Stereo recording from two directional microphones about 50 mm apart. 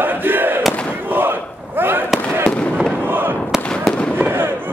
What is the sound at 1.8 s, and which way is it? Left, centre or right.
Fireworks, right.